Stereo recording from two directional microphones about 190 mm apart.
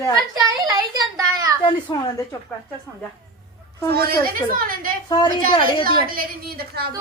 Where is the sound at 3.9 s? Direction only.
55° right (ahead or behind).